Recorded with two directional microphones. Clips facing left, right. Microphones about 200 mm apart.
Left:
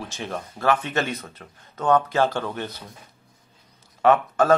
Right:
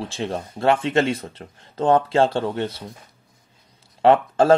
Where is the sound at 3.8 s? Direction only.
30° right (ahead or behind).